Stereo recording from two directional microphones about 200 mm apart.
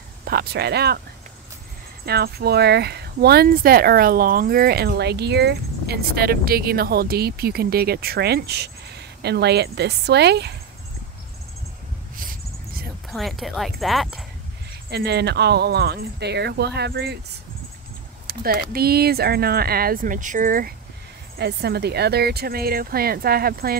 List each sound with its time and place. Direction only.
0.2 s speech: 50° right (ahead or behind)
2.0 s speech: 50° right (ahead or behind)
12.2 s a sound: 45° right (ahead or behind)
13.1 s speech: centre (ahead or behind)
14.9 s speech: 55° right (ahead or behind)
18.4 s speech: 50° right (ahead or behind)